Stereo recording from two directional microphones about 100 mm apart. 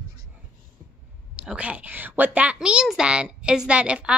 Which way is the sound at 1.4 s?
15° right (ahead or behind).